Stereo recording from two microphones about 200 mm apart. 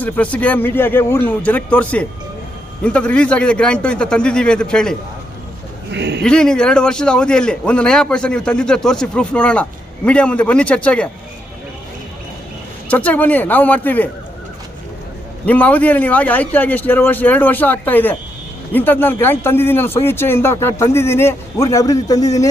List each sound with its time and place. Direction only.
0.0 s a man's voice: 5° left (ahead or behind)
5.9 s speech: 60° right (ahead or behind)
6.2 s a man's voice: 5° left (ahead or behind)
12.9 s a man's voice: 5° left (ahead or behind)
15.4 s a man's voice: 5° left (ahead or behind)